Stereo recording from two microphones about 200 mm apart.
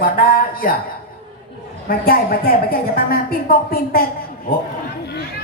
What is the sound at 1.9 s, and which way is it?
Speech, 45° left (ahead or behind).